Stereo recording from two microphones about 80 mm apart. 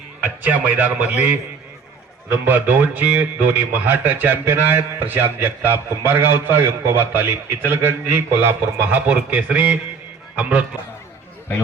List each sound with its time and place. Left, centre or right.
0.4 s speech: right
2.3 s speech: right